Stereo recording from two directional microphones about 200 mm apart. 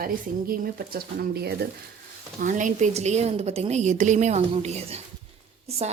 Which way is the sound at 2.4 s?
40° right (ahead or behind).